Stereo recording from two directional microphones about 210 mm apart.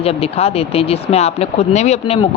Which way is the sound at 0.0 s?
30° left (ahead or behind).